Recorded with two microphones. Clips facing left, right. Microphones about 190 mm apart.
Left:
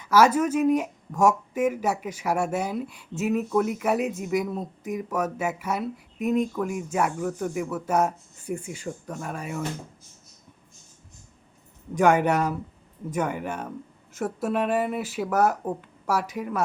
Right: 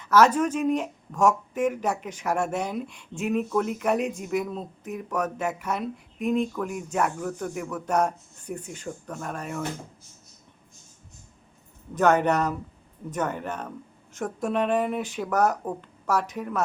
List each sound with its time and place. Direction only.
0.0 s speech: 10° left (ahead or behind)
11.9 s speech: 10° left (ahead or behind)